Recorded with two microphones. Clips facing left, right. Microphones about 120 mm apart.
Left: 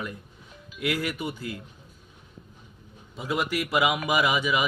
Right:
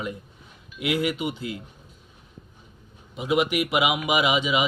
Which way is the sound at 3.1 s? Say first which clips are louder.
Right 5 dB; 20° right (ahead or behind).